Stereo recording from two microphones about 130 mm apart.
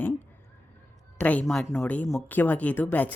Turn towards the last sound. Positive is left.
turn(degrees=15)  # may be behind; listen again after turning